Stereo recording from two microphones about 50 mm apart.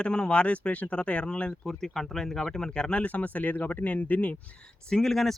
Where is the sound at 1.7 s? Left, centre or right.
Centre.